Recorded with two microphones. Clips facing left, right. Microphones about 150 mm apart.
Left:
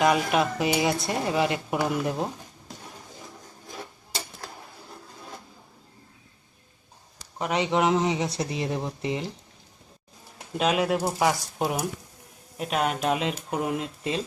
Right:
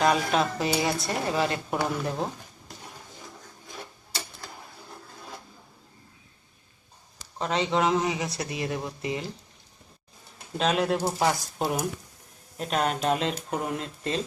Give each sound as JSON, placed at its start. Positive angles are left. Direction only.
{"t": 0.0, "sound": "speech", "side_deg": 15}
{"t": 7.3, "sound": "speech", "side_deg": 15}
{"t": 10.6, "sound": "speech", "side_deg": 10}